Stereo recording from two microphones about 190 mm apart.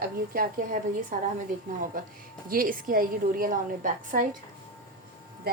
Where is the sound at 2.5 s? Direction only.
50° right (ahead or behind).